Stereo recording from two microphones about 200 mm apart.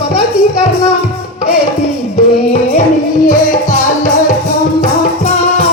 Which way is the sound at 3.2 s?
40° left (ahead or behind).